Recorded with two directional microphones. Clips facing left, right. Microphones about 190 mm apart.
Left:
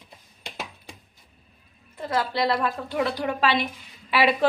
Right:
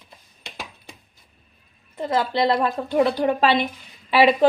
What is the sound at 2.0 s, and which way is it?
A woman's voice, 25° right (ahead or behind).